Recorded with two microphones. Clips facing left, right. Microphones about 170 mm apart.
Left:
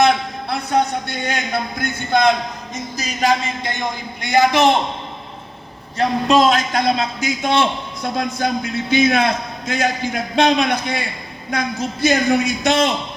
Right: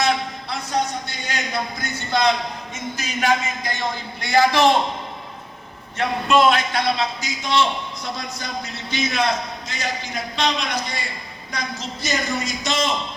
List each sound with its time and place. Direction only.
0.0 s a sound: 60° left (ahead or behind)
1.8 s a man's voice: 55° left (ahead or behind)
2.7 s speech: 35° left (ahead or behind); by 4.8 s 20° left (ahead or behind)
6.0 s a man's voice: 40° left (ahead or behind); by 12.9 s 60° left (ahead or behind)